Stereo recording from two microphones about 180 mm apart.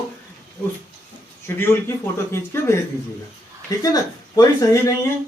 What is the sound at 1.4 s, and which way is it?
Speech, 15° left (ahead or behind).